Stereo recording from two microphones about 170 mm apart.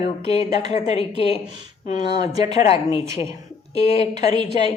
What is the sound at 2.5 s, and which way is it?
A woman's voice, 40° left (ahead or behind).